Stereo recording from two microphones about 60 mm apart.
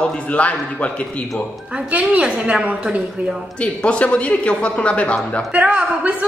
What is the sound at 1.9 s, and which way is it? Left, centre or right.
A woman's voice, centre.